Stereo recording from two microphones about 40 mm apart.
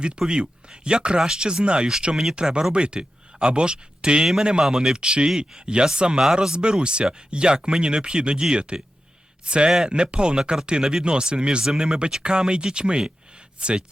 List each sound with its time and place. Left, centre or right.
0.2 s speech: right
4.6 s speech: centre